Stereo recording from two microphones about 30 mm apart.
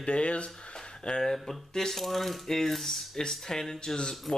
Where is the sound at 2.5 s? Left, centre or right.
Centre.